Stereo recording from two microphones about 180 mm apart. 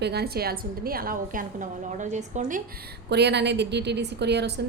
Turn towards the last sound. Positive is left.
turn(degrees=-70)  # may be behind; listen again after turning